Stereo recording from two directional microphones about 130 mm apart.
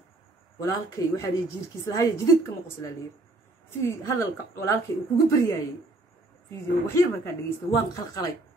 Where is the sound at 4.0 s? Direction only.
25° left (ahead or behind).